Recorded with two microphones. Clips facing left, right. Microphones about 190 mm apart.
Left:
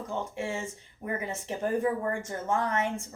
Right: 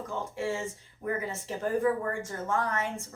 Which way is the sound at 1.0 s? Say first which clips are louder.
Right 1 dB; 20° left (ahead or behind).